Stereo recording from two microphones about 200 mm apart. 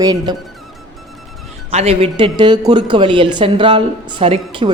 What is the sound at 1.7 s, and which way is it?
A woman's voice, 30° right (ahead or behind).